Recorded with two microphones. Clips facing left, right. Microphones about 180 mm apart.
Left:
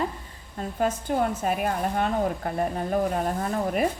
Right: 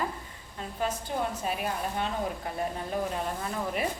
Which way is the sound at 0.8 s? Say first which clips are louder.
Left 6 dB; 50° left (ahead or behind).